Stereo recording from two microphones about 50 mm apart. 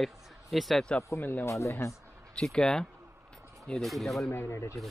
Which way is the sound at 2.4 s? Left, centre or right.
Centre.